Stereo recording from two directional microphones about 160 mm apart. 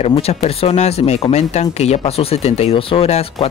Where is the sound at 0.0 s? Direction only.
40° left (ahead or behind).